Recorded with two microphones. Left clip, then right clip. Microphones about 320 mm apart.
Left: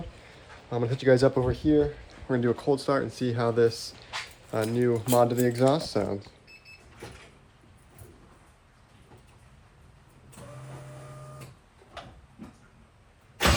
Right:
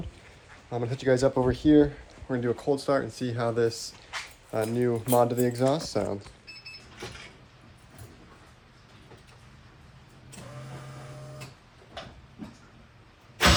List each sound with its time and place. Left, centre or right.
0.7 s speech: centre
1.5 s speech: right
2.2 s speech: centre